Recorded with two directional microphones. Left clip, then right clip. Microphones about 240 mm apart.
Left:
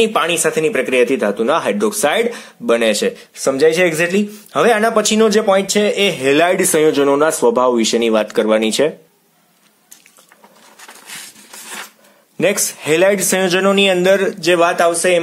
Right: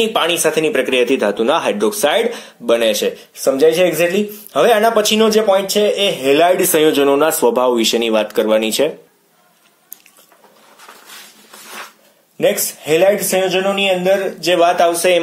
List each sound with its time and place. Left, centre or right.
0.0 s a man's voice: left
12.4 s speech: left